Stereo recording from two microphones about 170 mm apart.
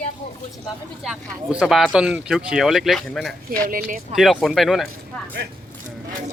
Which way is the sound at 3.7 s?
55° right (ahead or behind).